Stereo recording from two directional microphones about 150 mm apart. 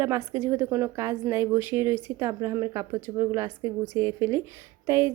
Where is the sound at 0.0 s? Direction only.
20° right (ahead or behind).